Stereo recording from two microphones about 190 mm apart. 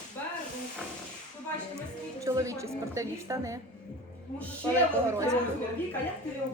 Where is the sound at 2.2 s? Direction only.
15° right (ahead or behind).